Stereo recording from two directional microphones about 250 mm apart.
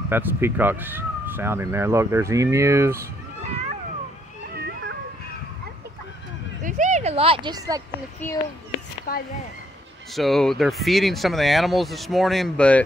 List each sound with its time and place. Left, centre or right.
0.1 s speech: centre
6.6 s speech: right
8.2 s a child's voice: centre
9.1 s speech: left
10.1 s speech: centre